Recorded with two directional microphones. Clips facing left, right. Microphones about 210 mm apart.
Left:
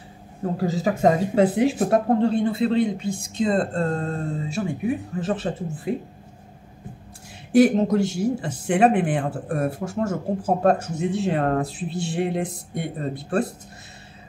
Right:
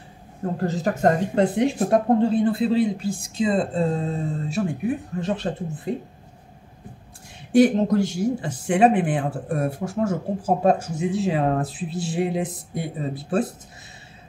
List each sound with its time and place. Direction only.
0.4 s speech: centre (ahead or behind)
7.5 s speech: centre (ahead or behind)